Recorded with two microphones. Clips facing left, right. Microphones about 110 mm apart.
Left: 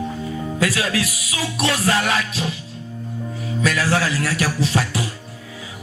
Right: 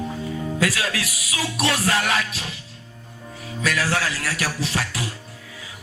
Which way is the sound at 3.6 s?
30° left (ahead or behind).